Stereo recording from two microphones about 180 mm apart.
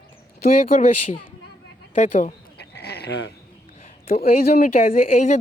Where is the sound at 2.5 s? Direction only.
65° left (ahead or behind).